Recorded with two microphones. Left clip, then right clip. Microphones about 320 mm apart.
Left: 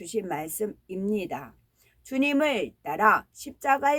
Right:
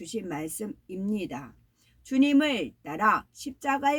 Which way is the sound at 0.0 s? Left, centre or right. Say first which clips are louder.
Left 4 dB; centre.